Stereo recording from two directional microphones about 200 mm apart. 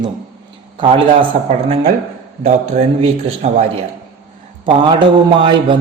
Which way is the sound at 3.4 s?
30° right (ahead or behind).